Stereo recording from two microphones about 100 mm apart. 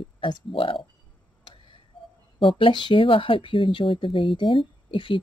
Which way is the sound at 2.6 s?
55° left (ahead or behind).